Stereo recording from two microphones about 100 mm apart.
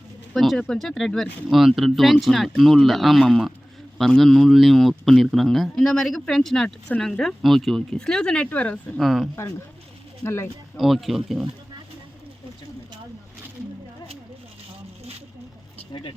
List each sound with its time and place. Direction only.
0.3 s speech: 5° left (ahead or behind)
9.0 s speech: centre (ahead or behind)
10.2 s speech: 25° left (ahead or behind)
10.8 s speech: centre (ahead or behind)
15.9 s speech: 50° left (ahead or behind)